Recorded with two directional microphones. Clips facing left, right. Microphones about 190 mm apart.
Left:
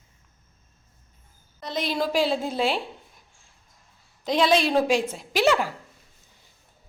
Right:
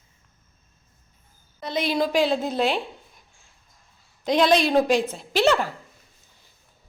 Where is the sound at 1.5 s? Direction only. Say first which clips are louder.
Right 3 dB; centre (ahead or behind).